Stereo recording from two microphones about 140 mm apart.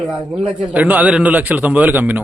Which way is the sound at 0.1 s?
5° right (ahead or behind).